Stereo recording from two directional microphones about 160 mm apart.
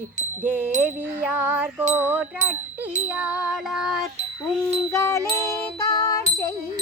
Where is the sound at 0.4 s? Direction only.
10° right (ahead or behind).